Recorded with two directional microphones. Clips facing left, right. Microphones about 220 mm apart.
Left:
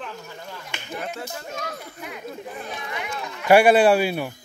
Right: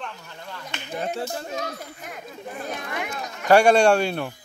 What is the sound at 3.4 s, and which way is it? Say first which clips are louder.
Speech: left 1 dB; 5° left (ahead or behind).